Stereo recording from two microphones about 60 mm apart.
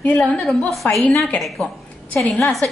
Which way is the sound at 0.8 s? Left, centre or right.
Left.